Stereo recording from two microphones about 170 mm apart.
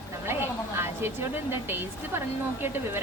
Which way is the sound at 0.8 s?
15° right (ahead or behind).